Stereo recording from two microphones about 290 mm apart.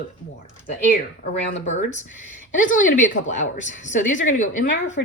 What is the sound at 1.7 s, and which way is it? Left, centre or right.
Speech, left.